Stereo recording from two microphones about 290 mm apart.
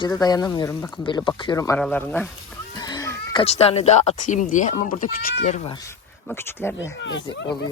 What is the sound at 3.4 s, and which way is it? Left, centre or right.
Speech, left.